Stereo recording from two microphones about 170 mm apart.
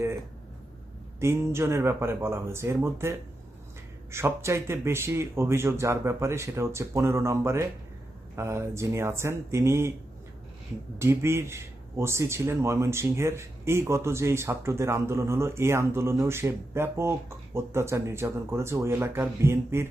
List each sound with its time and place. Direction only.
1.2 s speech: 15° right (ahead or behind)
10.9 s speech: 15° right (ahead or behind)